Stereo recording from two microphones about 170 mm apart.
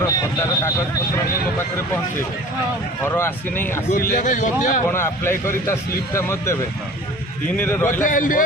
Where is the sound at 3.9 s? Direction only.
55° left (ahead or behind).